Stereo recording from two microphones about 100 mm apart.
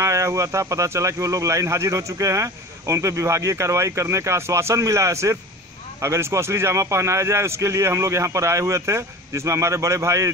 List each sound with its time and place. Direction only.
0.0 s a man's voice: 30° right (ahead or behind)